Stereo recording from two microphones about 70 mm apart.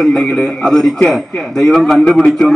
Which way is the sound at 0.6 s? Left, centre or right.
Centre.